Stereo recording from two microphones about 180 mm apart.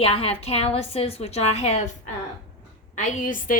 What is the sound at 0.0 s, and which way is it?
A woman's voice, 30° left (ahead or behind).